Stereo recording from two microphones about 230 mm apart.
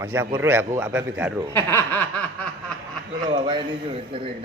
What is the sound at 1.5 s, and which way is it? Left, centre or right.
Snicker, centre.